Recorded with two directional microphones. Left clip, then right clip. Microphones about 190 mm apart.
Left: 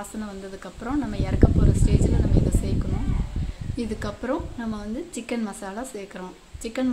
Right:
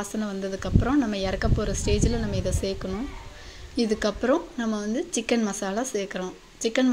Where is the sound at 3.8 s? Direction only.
15° right (ahead or behind).